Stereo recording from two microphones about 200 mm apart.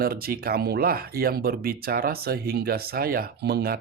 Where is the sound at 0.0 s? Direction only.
50° right (ahead or behind).